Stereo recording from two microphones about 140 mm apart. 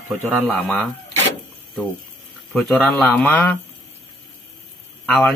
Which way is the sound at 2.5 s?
Centre (ahead or behind).